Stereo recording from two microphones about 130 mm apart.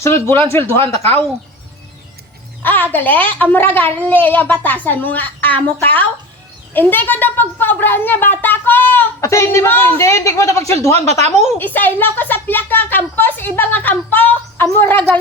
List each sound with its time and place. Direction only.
0.0 s speech: 20° left (ahead or behind)
2.9 s a child's voice: 15° left (ahead or behind)
11.2 s a woman's voice: 60° right (ahead or behind)
11.5 s a child's voice: 15° left (ahead or behind)